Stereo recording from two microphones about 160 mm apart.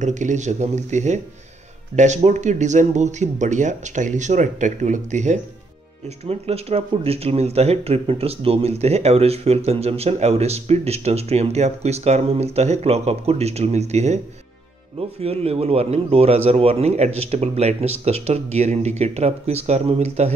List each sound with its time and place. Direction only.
0.0 s speech: 50° right (ahead or behind)